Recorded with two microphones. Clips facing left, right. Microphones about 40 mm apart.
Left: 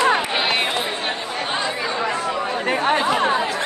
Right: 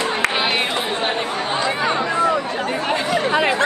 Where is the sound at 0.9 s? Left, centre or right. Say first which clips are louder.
Right 4 dB; right.